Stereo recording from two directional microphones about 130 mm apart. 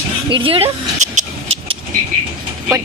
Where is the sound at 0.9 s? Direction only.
65° right (ahead or behind).